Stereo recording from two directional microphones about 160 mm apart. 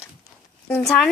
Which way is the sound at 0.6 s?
5° left (ahead or behind).